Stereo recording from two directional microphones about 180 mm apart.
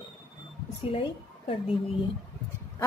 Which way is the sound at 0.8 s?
30° left (ahead or behind).